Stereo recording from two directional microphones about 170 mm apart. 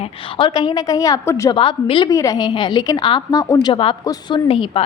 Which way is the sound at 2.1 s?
20° left (ahead or behind).